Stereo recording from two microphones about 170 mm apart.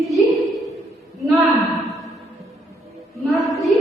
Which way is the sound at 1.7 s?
Centre (ahead or behind).